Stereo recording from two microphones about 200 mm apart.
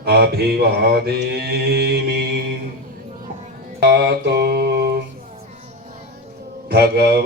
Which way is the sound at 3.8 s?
55° right (ahead or behind).